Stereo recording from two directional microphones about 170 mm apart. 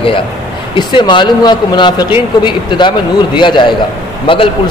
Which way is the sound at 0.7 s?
30° left (ahead or behind).